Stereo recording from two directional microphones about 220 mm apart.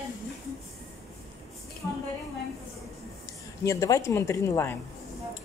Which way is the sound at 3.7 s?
15° left (ahead or behind).